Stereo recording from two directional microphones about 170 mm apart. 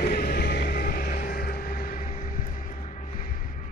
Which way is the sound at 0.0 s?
65° left (ahead or behind).